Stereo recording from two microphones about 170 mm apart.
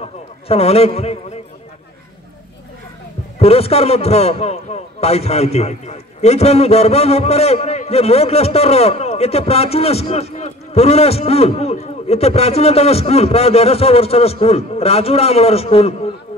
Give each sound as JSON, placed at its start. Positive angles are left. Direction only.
{"t": 0.5, "sound": "a man's voice", "side_deg": 35}
{"t": 3.3, "sound": "a man's voice", "side_deg": 35}